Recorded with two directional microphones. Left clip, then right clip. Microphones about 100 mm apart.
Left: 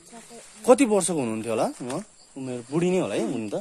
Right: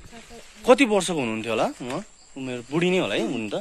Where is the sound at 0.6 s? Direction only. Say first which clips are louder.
Right 1 dB; 20° left (ahead or behind).